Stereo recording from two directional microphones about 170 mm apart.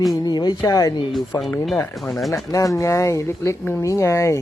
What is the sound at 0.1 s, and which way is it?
Speech, 25° left (ahead or behind).